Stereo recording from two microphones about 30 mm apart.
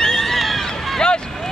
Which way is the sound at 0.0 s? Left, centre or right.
Centre.